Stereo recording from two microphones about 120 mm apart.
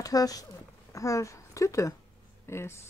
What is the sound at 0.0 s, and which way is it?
Speech, 30° left (ahead or behind).